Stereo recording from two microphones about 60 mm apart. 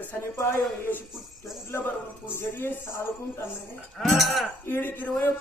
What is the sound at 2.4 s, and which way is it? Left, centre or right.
Speech, left.